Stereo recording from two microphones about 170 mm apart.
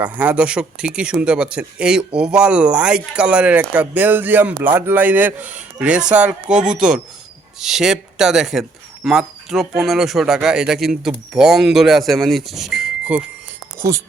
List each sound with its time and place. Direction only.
0.0 s speech: 10° right (ahead or behind)
13.7 s speech: 15° right (ahead or behind)